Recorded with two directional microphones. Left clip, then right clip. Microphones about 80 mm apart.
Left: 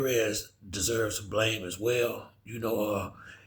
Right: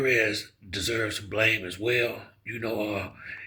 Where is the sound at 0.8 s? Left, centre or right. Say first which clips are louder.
Right 1 dB; left.